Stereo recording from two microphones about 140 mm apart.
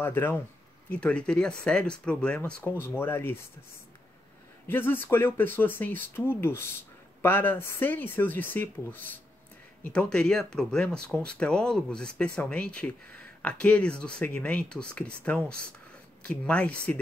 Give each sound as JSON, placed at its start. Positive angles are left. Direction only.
{"t": 0.0, "sound": "speech", "side_deg": 15}
{"t": 4.6, "sound": "speech", "side_deg": 15}